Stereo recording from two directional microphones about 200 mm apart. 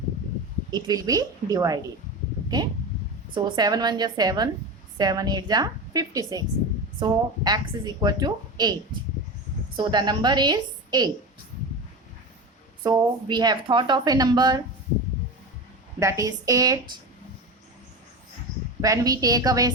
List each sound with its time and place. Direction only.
0.7 s a woman's voice: 20° right (ahead or behind)
3.3 s speech: 20° right (ahead or behind)
9.7 s speech: 20° right (ahead or behind)
12.8 s speech: 20° right (ahead or behind)
16.0 s a woman's voice: 15° right (ahead or behind)
18.8 s a woman's voice: 15° right (ahead or behind)